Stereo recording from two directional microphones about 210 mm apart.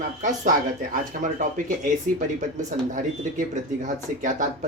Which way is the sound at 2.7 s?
35° right (ahead or behind).